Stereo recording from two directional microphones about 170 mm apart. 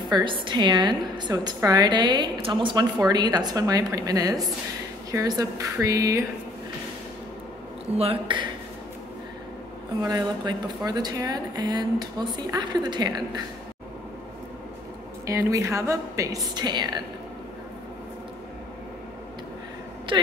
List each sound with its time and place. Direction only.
0.1 s a woman's voice: 30° right (ahead or behind)
8.0 s speech: 30° right (ahead or behind)
10.0 s a woman's voice: 25° right (ahead or behind)
15.2 s a woman's voice: 15° right (ahead or behind)
20.1 s a woman's voice: 25° right (ahead or behind)